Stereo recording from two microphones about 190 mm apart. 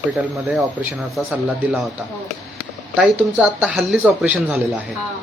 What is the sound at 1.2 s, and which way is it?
Speech, 5° right (ahead or behind).